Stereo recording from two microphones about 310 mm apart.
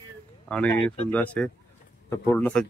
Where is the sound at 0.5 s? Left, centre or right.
Centre.